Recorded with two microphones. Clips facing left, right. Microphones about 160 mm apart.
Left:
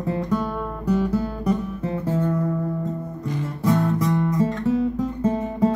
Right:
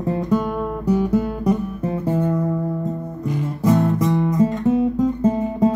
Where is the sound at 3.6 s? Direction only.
20° right (ahead or behind).